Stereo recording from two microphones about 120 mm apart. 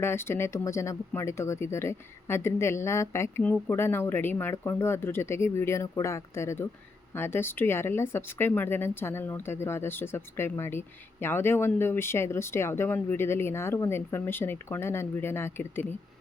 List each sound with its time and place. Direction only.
0.0 s speech: 20° left (ahead or behind)